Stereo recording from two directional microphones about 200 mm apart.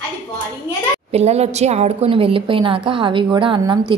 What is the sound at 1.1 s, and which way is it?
A woman's voice, 30° right (ahead or behind).